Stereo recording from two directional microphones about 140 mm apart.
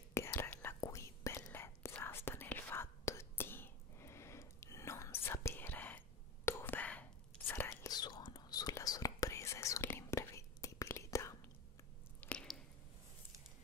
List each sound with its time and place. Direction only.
0.1 s whispering: 20° left (ahead or behind)
12.2 s squish: 10° left (ahead or behind)